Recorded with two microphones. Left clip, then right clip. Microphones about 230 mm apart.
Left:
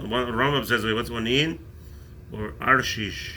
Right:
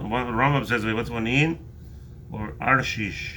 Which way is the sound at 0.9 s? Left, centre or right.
Right.